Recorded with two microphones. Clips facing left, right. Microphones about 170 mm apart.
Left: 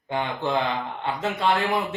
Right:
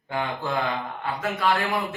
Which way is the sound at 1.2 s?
25° left (ahead or behind).